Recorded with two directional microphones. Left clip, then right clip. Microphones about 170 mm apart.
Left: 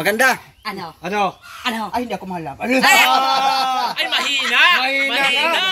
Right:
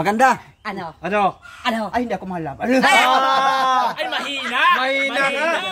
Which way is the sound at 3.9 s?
75° right (ahead or behind).